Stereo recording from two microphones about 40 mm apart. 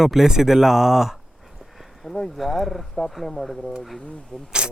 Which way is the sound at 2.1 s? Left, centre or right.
Left.